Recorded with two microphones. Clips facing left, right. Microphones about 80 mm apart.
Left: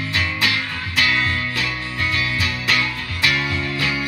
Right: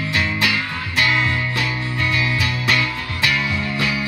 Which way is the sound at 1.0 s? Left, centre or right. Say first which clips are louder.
Right 1 dB; right.